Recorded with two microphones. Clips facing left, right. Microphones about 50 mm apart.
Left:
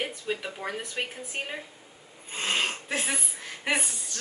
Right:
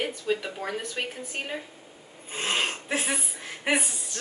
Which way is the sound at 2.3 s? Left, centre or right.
Centre.